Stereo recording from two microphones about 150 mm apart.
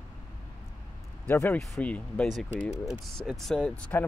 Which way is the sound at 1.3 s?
10° left (ahead or behind).